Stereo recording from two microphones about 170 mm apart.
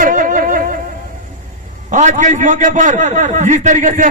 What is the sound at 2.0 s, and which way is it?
A man's voice, 45° right (ahead or behind).